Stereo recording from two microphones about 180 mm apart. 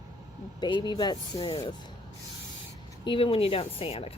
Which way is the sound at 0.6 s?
25° left (ahead or behind).